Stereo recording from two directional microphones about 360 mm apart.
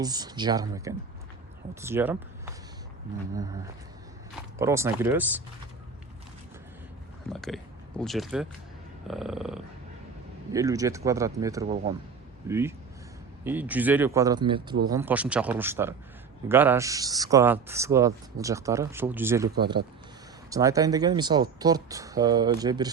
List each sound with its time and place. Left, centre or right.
0.0 s speech: centre
7.3 s speech: centre